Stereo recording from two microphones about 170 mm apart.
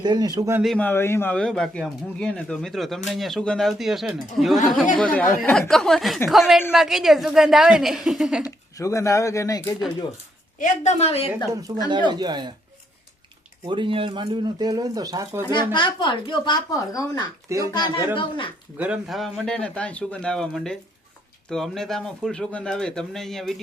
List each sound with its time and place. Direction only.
0.0 s speech: 25° right (ahead or behind)
0.6 s speech: 5° left (ahead or behind)
8.7 s speech: 20° left (ahead or behind)
10.6 s a woman's voice: 45° left (ahead or behind)
11.9 s speech: 25° right (ahead or behind)
13.7 s speech: 30° right (ahead or behind)
15.7 s speech: 30° left (ahead or behind)
18.8 s speech: 5° right (ahead or behind)